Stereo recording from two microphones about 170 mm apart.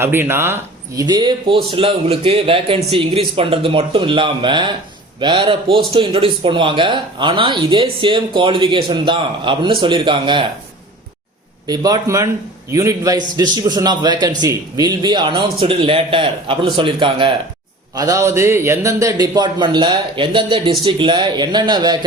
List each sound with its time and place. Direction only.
0.0 s speech: 15° right (ahead or behind); by 10.4 s 30° right (ahead or behind)
11.6 s speech: 20° right (ahead or behind)
17.9 s a man's voice: 20° right (ahead or behind)